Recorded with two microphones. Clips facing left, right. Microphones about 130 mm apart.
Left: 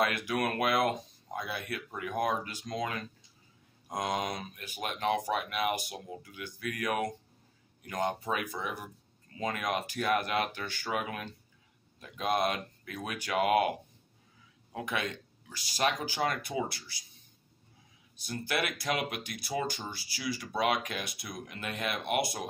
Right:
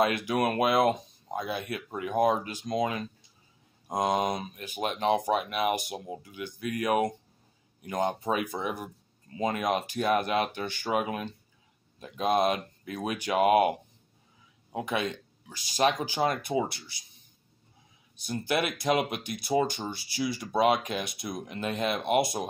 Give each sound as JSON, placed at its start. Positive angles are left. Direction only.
{"t": 0.0, "sound": "speech", "side_deg": -25}
{"t": 18.1, "sound": "speech", "side_deg": -20}